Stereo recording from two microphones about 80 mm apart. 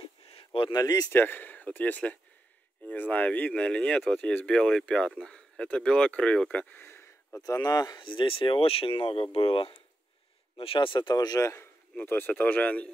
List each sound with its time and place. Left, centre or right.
0.0 s a sound: left
0.7 s speech: left
1.1 s speech: left; by 4.3 s centre
4.3 s speech: left
6.9 s a sound: left
7.4 s speech: left
8.0 s speech: left
10.8 s speech: left
11.9 s speech: left